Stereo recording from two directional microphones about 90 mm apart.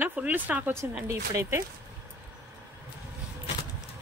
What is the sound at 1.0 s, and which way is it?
Speech, 30° right (ahead or behind).